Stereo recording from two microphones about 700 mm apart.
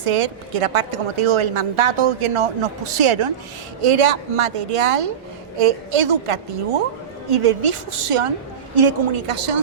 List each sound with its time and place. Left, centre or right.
0.0 s a woman's voice: right